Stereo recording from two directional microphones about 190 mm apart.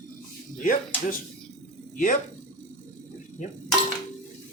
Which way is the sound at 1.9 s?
45° left (ahead or behind).